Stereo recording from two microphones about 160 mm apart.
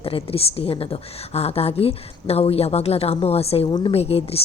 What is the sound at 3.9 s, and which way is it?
Speech, 40° left (ahead or behind).